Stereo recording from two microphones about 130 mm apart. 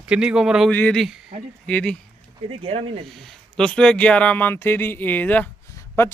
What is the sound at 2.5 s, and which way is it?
Speech, 50° right (ahead or behind).